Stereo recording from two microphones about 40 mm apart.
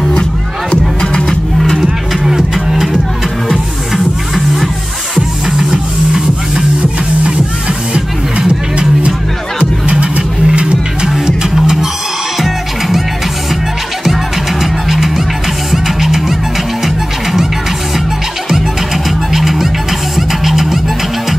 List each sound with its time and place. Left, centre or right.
1.0 s music: centre
1.8 s music: centre
5.1 s music: centre
7.9 s music: right
11.1 s music: centre
14.6 s music: centre
19.0 s music: centre